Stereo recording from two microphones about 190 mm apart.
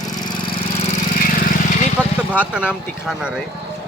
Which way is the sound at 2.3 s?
5° right (ahead or behind).